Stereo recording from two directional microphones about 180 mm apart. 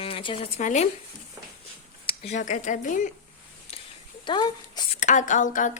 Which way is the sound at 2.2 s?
40° left (ahead or behind).